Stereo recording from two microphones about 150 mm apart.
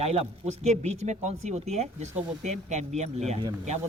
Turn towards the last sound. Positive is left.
turn(degrees=-50)  # may be behind; listen again after turning